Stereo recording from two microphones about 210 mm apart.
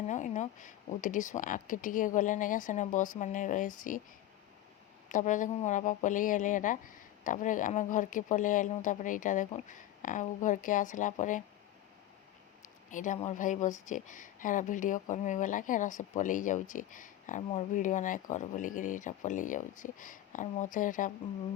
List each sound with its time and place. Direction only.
0.1 s speech: 35° left (ahead or behind)
5.0 s speech: 35° left (ahead or behind)
12.6 s speech: 35° left (ahead or behind)